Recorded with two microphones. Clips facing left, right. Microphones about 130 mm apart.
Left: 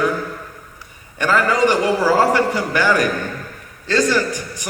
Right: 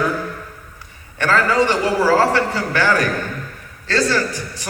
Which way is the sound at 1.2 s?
15° left (ahead or behind).